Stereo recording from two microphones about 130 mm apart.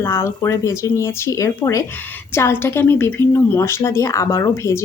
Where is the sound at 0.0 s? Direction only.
20° left (ahead or behind).